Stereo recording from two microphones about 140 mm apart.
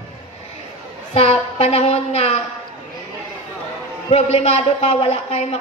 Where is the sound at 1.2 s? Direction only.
45° left (ahead or behind).